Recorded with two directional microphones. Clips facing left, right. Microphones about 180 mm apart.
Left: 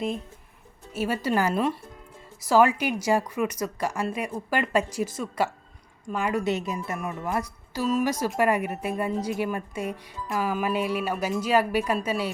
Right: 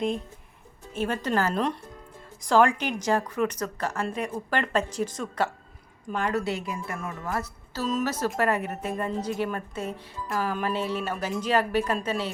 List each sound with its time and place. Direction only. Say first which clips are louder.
0.9 s a woman's voice: left 1 dB; 10° left (ahead or behind)
6.4 s a woman's voice: left 3 dB; 20° left (ahead or behind)